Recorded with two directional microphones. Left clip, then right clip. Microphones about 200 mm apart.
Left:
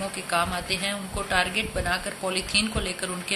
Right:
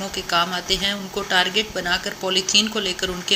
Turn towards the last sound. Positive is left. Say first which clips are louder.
# right 6 dB
turn(degrees=-15)  # may be behind; listen again after turning